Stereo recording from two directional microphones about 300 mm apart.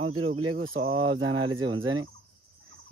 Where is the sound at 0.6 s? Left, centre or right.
Right.